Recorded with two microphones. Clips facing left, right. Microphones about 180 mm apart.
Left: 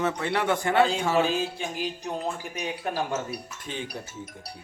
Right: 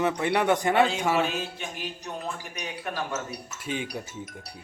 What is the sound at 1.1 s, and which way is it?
Speech, 35° left (ahead or behind).